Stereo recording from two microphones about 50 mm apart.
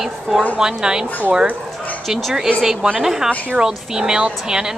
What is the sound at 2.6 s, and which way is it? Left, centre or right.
Speech, centre.